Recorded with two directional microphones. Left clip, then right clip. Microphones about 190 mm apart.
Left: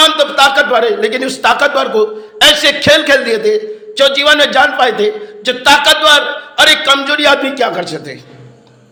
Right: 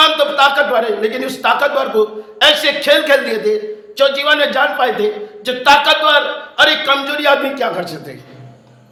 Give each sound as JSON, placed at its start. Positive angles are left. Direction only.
{"t": 0.2, "sound": "a man's voice", "side_deg": 25}